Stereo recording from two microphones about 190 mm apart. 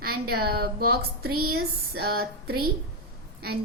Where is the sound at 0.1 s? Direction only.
55° right (ahead or behind).